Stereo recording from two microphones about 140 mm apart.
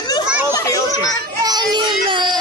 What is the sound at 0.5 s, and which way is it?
Children playing, 25° left (ahead or behind).